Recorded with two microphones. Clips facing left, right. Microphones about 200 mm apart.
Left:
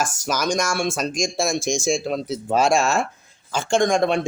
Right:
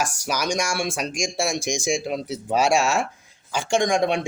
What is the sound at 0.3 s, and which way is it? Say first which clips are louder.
Speech: left 3 dB; 10° right (ahead or behind).